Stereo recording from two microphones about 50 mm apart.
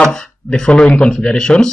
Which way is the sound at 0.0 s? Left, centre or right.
Centre.